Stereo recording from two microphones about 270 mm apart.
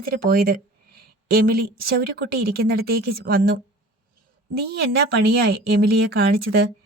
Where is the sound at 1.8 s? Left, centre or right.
Right.